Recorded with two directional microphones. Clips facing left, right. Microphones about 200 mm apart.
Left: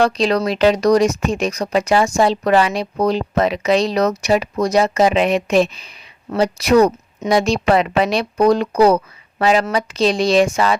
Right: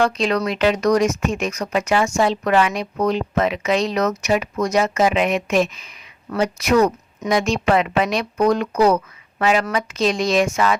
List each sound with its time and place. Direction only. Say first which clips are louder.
0.0 s speech: left 3 dB; 35° left (ahead or behind)